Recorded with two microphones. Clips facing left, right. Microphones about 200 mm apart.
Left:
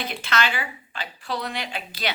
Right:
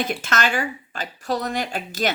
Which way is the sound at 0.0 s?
45° right (ahead or behind).